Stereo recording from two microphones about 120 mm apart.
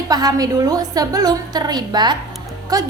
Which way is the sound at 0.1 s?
35° right (ahead or behind).